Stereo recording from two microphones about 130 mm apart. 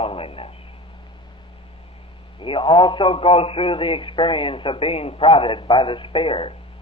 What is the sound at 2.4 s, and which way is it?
A man's voice, 40° left (ahead or behind).